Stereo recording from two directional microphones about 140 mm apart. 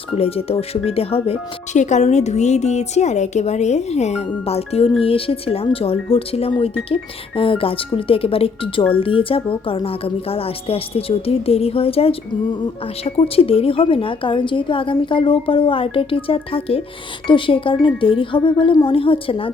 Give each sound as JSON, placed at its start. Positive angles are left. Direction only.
{"t": 0.2, "sound": "a woman's voice", "side_deg": 45}